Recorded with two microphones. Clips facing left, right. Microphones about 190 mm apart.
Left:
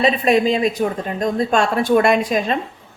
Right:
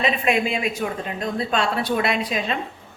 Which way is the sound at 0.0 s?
35° left (ahead or behind).